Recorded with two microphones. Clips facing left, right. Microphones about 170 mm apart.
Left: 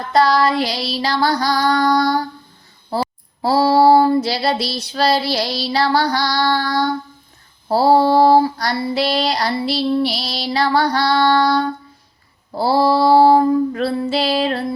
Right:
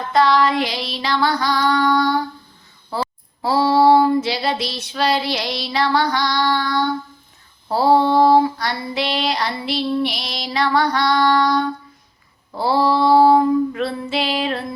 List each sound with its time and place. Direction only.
0.1 s female singing: 35° left (ahead or behind)
2.9 s speech: 40° left (ahead or behind)
3.4 s female singing: 35° left (ahead or behind)